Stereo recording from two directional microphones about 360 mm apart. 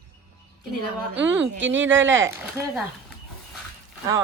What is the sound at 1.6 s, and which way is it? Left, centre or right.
Speech, right.